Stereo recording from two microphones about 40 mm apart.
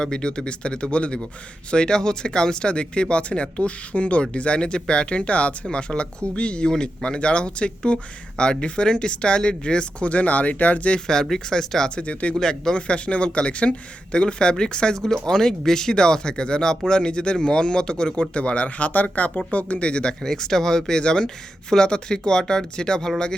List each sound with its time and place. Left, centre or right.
0.0 s speech: left
11.0 s speech: centre
11.9 s speech: left
12.4 s speech: centre
12.7 s speech: left
19.9 s speech: left
20.2 s speech: centre